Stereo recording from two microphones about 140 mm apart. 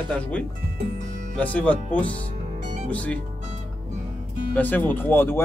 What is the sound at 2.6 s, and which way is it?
Music, 60° right (ahead or behind).